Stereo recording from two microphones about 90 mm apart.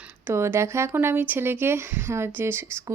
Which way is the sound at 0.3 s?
30° right (ahead or behind).